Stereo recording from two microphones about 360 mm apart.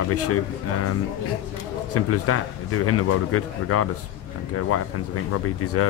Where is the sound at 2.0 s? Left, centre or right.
Left.